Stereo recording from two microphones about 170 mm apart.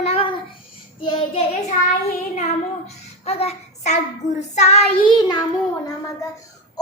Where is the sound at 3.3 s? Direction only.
35° left (ahead or behind).